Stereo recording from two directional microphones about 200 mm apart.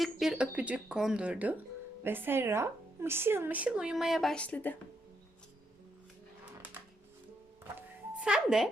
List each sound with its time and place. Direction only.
0.0 s a woman's voice: centre (ahead or behind)
7.8 s music: 5° right (ahead or behind)